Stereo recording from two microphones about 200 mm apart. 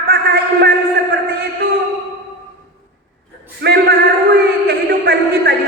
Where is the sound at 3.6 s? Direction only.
55° right (ahead or behind).